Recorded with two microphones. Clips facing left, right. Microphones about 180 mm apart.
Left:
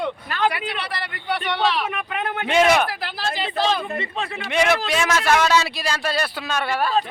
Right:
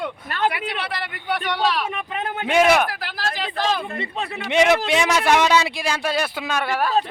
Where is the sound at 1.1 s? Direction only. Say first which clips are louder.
Even; 5° right (ahead or behind).